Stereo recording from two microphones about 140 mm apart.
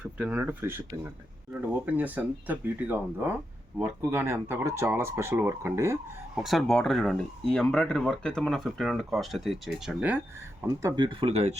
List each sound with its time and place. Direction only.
0.0 s speech: 10° right (ahead or behind)
6.3 s speech: centre (ahead or behind)
10.9 s speech: 35° right (ahead or behind)